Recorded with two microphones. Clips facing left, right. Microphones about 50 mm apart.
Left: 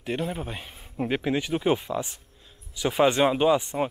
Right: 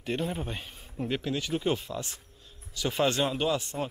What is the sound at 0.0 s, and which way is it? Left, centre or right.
Speech, centre.